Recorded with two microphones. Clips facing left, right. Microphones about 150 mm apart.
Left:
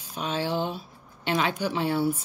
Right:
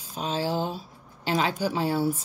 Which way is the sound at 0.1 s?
35° right (ahead or behind).